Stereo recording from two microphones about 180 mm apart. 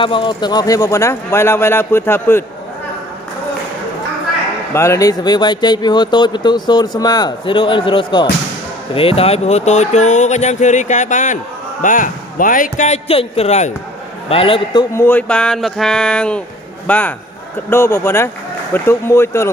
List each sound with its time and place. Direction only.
0.0 s speech: 30° left (ahead or behind); by 2.4 s 10° left (ahead or behind)
4.7 s a man's voice: 15° left (ahead or behind)
15.0 s a man's voice: 10° left (ahead or behind)